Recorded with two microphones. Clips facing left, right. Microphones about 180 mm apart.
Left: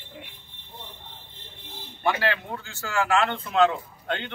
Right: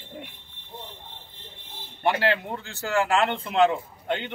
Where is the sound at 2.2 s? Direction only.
20° right (ahead or behind).